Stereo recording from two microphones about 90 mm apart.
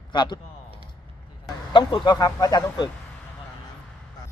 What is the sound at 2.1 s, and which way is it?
Speech, 45° left (ahead or behind).